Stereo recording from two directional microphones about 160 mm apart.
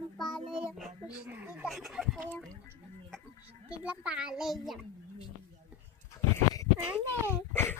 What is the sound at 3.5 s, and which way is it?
A child's voice, 10° right (ahead or behind).